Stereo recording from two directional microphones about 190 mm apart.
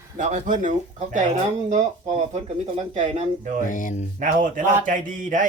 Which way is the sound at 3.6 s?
45° left (ahead or behind).